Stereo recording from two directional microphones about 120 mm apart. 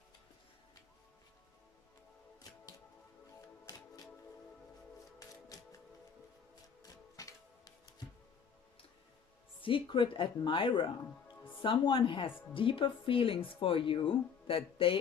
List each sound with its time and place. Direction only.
6.8 s music: 30° left (ahead or behind)
9.6 s speech: 45° left (ahead or behind)